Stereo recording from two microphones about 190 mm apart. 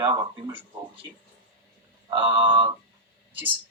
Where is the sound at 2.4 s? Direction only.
25° right (ahead or behind).